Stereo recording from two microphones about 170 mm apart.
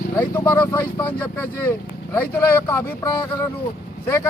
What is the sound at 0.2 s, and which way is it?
Speech, 15° left (ahead or behind).